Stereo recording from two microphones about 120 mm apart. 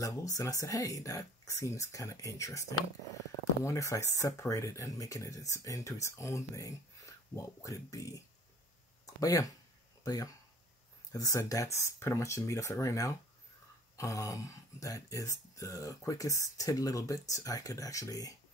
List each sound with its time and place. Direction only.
0.0 s speech: 30° left (ahead or behind)